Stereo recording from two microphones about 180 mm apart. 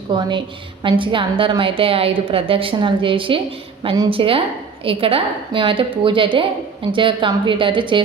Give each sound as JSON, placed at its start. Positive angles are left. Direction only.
{"t": 0.1, "sound": "a woman's voice", "side_deg": -25}